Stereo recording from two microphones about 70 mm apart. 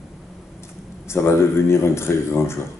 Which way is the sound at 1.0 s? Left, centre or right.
Left.